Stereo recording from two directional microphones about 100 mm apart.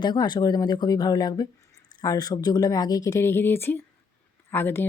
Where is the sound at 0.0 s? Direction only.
45° left (ahead or behind).